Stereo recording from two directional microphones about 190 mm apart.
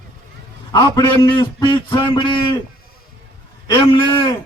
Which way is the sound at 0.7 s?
20° left (ahead or behind).